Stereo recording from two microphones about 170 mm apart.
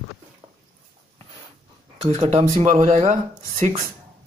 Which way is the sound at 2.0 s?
40° right (ahead or behind).